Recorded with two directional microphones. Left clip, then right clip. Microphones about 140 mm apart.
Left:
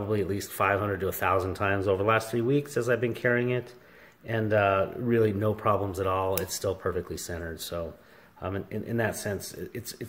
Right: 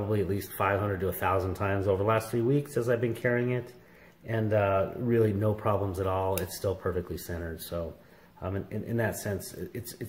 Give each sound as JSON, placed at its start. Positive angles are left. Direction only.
{"t": 0.1, "sound": "speech", "side_deg": 10}